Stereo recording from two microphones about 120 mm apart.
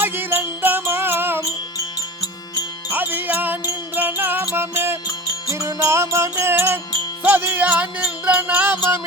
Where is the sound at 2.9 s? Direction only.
15° right (ahead or behind).